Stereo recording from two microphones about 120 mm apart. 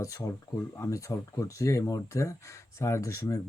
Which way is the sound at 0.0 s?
30° left (ahead or behind).